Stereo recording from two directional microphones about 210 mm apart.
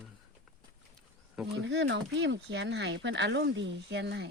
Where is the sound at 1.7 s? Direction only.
60° right (ahead or behind).